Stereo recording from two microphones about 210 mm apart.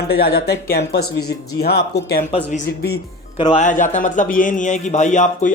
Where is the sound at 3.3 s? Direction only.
25° left (ahead or behind).